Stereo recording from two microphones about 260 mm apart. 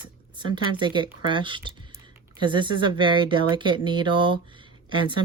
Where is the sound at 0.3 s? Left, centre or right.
Centre.